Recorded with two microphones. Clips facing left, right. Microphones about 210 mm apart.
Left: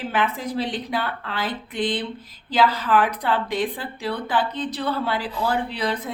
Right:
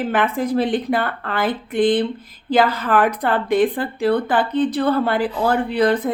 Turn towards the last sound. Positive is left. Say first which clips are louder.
# right 9 dB
turn(degrees=-55)  # may be behind; listen again after turning